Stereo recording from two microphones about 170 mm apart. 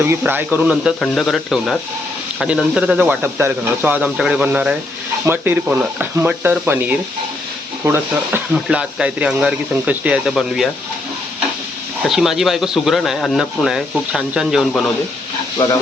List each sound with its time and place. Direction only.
0.0 s speech: 10° right (ahead or behind)
12.0 s speech: centre (ahead or behind)